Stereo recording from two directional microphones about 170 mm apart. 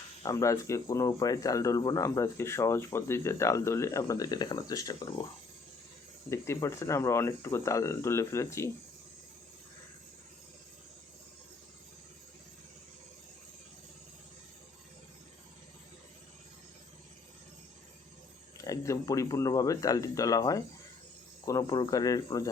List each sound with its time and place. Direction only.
0.2 s speech: 20° left (ahead or behind)
6.3 s speech: 15° left (ahead or behind)
18.5 s speech: 20° left (ahead or behind)